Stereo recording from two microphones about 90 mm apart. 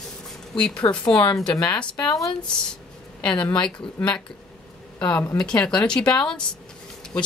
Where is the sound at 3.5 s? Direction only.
10° left (ahead or behind).